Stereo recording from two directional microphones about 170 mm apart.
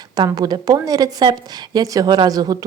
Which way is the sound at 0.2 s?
25° right (ahead or behind).